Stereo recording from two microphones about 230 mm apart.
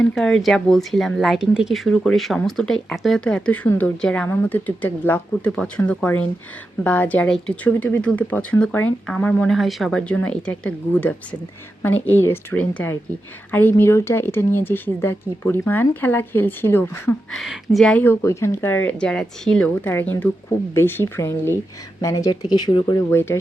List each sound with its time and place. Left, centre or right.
0.0 s speech: centre